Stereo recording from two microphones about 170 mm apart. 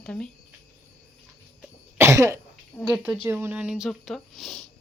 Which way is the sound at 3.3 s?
15° right (ahead or behind).